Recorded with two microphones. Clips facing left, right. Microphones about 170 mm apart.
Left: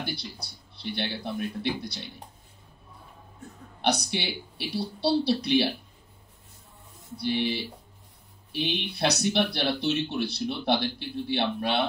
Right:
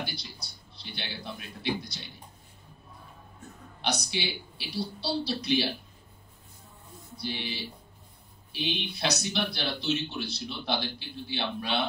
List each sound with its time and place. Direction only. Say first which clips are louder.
0.0 s speech: left 4 dB; 60° left (ahead or behind)
3.8 s speech: left 4 dB; 60° left (ahead or behind)
7.2 s speech: left 8 dB; 60° left (ahead or behind)